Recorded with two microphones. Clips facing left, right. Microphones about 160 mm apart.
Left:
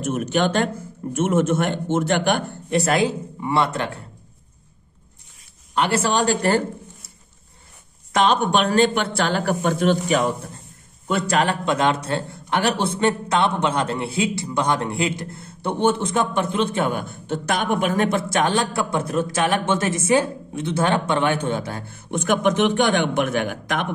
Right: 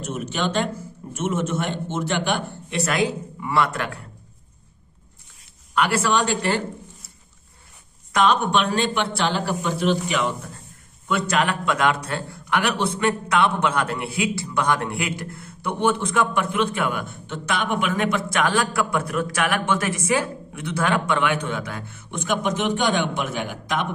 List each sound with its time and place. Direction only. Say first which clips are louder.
0.0 s a man's voice: left 5 dB; 50° left (ahead or behind)
2.8 s a man's voice: left 1 dB; 35° left (ahead or behind)
5.8 s a man's voice: left 1 dB; 25° left (ahead or behind)
8.1 s a man's voice: left 1 dB; 35° left (ahead or behind)
22.1 s a man's voice: left 5 dB; 55° left (ahead or behind)